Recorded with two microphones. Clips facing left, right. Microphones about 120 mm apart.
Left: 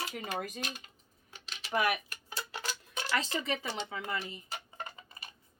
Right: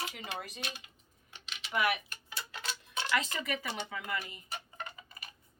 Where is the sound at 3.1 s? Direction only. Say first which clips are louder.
Left 1 dB; 30° left (ahead or behind).